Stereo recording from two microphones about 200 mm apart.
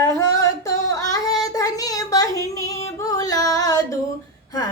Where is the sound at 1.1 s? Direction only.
20° left (ahead or behind).